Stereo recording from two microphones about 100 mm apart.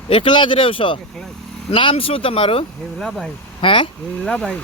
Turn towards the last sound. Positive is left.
turn(degrees=10)  # may be behind; listen again after turning